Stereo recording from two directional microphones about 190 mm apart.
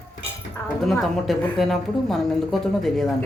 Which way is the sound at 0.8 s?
Centre (ahead or behind).